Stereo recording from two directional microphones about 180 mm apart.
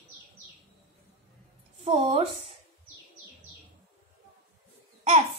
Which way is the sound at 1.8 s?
35° right (ahead or behind).